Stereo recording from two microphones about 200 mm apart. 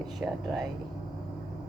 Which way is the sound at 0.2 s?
Centre (ahead or behind).